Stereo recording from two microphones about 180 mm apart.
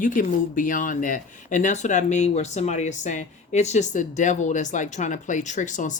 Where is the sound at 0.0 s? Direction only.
45° left (ahead or behind).